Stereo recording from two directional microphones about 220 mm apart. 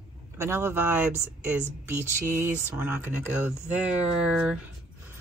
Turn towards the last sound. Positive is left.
turn(degrees=-5)  # may be behind; listen again after turning